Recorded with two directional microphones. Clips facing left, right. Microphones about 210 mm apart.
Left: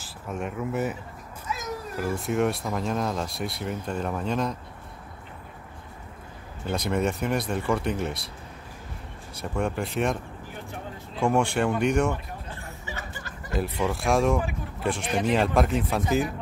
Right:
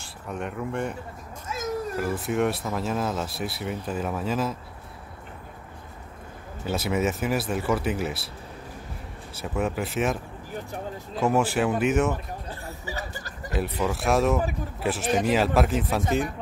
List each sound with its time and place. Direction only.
0.0 s speech: centre (ahead or behind)
2.0 s speech: centre (ahead or behind)
6.6 s speech: 5° right (ahead or behind)
9.3 s speech: 5° right (ahead or behind)
12.4 s a sound: 35° right (ahead or behind)
13.5 s speech: centre (ahead or behind)